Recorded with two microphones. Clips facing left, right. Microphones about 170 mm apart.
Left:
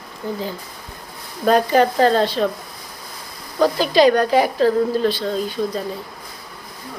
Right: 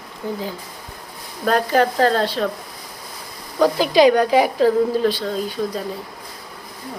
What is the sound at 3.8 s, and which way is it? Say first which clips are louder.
A woman's voice: right 1 dB; 15° right (ahead or behind).